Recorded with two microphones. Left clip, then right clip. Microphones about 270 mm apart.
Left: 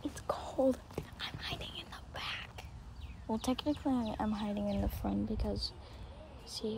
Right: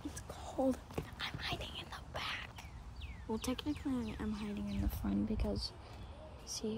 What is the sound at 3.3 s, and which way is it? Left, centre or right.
Speech, centre.